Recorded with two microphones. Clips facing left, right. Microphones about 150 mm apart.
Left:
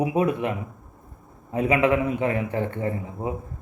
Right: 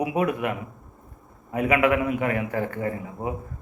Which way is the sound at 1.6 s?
25° left (ahead or behind).